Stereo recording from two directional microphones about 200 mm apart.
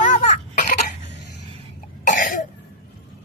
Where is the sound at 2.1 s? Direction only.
40° left (ahead or behind).